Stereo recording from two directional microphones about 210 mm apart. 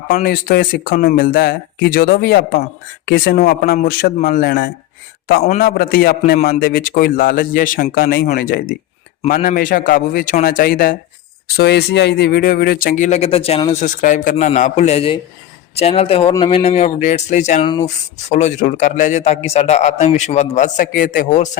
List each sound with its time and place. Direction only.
0.1 s a man's voice: 45° left (ahead or behind); by 13.8 s 25° left (ahead or behind)
13.8 s a man's voice: 40° left (ahead or behind)